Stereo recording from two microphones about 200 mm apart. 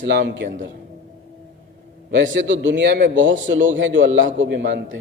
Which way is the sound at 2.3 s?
65° right (ahead or behind).